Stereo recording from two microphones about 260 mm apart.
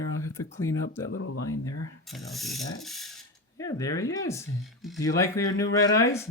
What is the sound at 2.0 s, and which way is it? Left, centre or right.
Speech, centre.